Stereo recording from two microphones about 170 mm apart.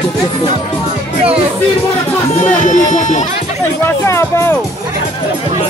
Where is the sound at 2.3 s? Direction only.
45° left (ahead or behind).